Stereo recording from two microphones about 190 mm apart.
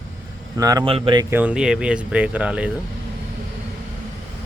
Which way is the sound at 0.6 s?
20° right (ahead or behind).